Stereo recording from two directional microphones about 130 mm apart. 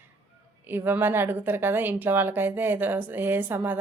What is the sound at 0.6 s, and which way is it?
A woman's voice, 15° right (ahead or behind).